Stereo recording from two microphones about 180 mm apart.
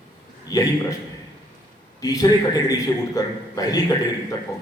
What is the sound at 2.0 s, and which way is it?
A man's voice, 20° left (ahead or behind).